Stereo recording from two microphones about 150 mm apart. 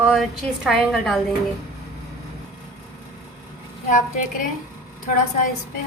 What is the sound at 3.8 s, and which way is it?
Speech, 60° left (ahead or behind).